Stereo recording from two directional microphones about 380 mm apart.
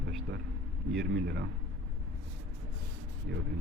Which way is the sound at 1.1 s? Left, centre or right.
Right.